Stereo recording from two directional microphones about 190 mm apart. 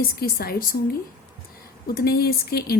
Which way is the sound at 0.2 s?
55° left (ahead or behind).